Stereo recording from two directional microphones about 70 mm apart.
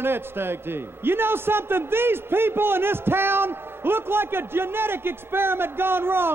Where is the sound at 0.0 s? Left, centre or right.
Right.